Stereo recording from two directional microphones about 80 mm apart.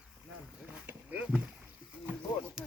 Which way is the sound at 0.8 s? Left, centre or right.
Centre.